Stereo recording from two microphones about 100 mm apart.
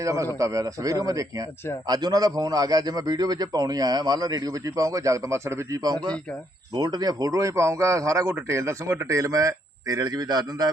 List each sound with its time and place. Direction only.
0.0 s a man's voice: 35° right (ahead or behind)